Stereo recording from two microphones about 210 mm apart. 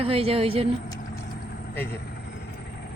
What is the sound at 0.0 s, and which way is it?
Speech, 30° right (ahead or behind).